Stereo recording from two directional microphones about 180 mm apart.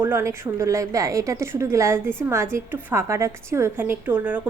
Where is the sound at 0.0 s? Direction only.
15° right (ahead or behind).